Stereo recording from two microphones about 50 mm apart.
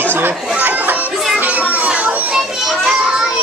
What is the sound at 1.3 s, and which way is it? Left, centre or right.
Children playing, right.